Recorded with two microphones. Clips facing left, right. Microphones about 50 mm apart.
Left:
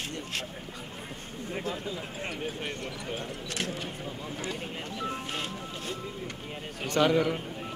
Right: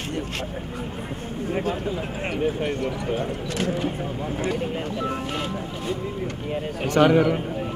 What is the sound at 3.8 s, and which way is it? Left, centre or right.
Speech, right.